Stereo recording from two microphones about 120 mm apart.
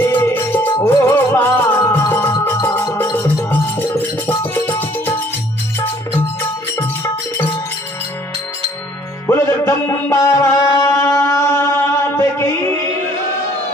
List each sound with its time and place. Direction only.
0.0 s music: 15° left (ahead or behind)
9.3 s music: 20° left (ahead or behind)